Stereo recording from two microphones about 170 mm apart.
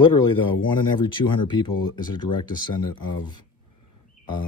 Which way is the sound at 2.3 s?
30° left (ahead or behind).